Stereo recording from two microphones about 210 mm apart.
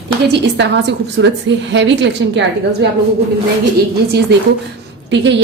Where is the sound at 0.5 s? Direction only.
55° right (ahead or behind).